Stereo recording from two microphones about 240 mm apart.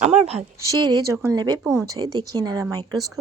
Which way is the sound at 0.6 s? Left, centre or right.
Centre.